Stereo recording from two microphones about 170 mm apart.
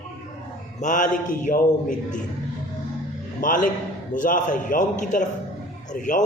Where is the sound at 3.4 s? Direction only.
50° left (ahead or behind).